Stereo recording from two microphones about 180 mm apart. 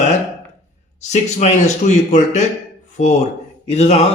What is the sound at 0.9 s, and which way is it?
Speech, 40° left (ahead or behind).